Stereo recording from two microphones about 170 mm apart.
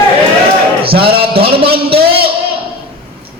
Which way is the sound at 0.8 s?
35° right (ahead or behind).